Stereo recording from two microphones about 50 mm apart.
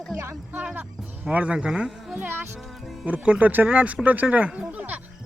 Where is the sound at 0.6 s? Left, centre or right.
Right.